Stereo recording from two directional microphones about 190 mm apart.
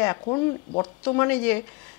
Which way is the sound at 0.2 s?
25° left (ahead or behind).